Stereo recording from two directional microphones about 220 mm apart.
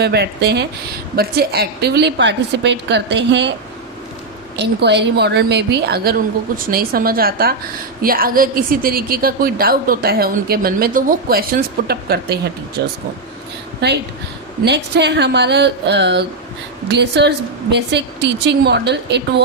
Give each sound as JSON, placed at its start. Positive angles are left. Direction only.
{"t": 0.0, "sound": "a woman's voice", "side_deg": -50}
{"t": 4.5, "sound": "a woman's voice", "side_deg": -50}